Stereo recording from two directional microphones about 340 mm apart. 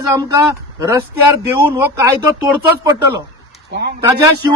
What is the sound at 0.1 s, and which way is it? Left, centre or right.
Speech, centre.